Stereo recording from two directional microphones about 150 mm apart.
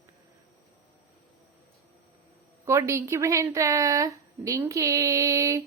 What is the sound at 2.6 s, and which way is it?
A woman's voice, 20° right (ahead or behind).